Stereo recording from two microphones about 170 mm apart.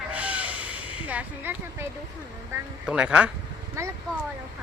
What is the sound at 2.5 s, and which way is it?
Speech, 5° right (ahead or behind).